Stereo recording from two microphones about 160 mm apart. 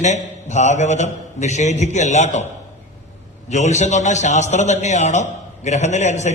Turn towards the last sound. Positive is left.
turn(degrees=45)  # may be behind; listen again after turning